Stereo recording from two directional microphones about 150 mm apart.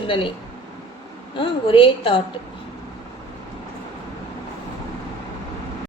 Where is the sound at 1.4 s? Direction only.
35° left (ahead or behind).